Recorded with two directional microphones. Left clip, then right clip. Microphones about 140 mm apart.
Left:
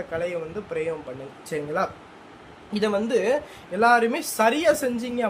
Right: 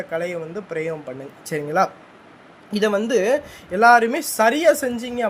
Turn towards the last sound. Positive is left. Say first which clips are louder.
# right 2 dB
turn(degrees=-35)  # may be behind; listen again after turning